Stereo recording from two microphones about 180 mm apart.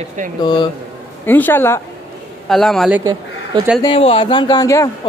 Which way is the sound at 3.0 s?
20° right (ahead or behind).